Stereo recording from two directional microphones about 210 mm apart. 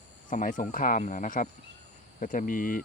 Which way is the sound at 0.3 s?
40° left (ahead or behind).